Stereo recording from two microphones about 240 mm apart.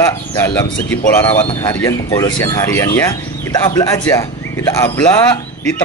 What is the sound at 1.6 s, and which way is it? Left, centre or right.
A man's voice, centre.